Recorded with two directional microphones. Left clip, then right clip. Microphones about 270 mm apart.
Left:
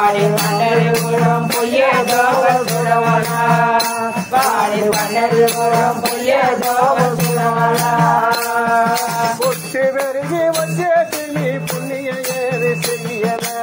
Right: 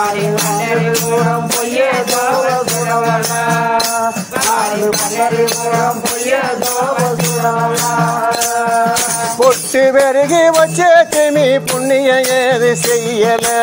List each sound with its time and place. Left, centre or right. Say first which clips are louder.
10.3 s music: right 7 dB; right